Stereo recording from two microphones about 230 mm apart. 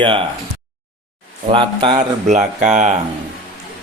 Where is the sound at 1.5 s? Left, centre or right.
Right.